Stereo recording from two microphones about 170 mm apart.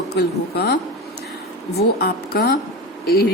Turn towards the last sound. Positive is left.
turn(degrees=65)  # may be behind; listen again after turning